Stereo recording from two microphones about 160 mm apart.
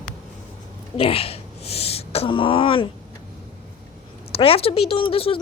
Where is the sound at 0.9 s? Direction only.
35° left (ahead or behind).